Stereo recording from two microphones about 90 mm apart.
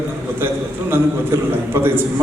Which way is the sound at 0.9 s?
25° right (ahead or behind).